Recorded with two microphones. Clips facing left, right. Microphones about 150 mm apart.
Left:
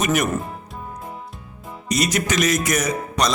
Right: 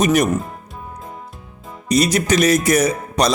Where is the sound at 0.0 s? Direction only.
35° right (ahead or behind).